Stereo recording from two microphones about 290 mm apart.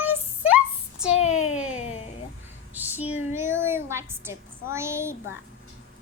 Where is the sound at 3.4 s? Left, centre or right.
Centre.